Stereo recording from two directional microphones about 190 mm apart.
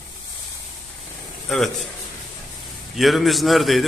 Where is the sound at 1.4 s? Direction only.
Centre (ahead or behind).